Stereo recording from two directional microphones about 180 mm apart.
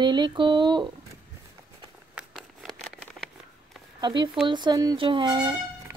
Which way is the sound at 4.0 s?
25° right (ahead or behind).